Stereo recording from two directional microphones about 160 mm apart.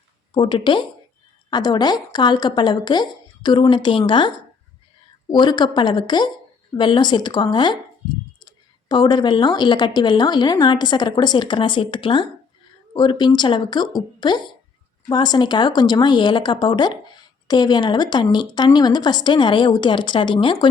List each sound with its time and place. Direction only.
0.3 s a woman's voice: 30° left (ahead or behind)
5.3 s a woman's voice: 25° left (ahead or behind)